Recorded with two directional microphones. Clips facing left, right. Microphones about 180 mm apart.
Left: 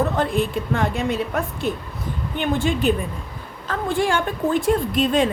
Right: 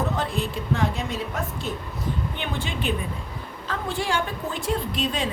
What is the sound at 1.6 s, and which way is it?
Speech, 55° left (ahead or behind).